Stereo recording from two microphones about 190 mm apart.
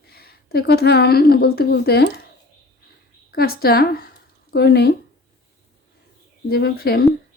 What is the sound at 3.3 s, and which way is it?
A woman's voice, 55° left (ahead or behind).